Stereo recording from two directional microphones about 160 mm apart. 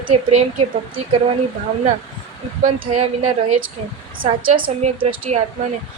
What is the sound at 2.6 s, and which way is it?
Speech, 45° right (ahead or behind).